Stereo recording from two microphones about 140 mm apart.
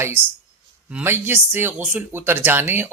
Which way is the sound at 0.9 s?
15° right (ahead or behind).